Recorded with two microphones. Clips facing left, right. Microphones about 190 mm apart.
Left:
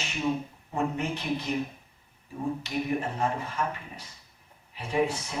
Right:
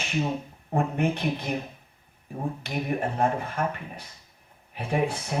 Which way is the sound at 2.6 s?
55° right (ahead or behind).